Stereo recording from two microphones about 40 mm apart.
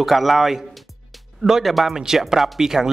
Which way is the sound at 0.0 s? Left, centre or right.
Centre.